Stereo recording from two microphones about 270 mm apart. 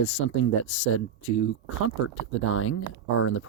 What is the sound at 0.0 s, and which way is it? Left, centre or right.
Speech, left.